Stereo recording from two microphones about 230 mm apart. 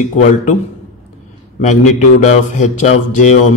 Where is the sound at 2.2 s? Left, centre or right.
Left.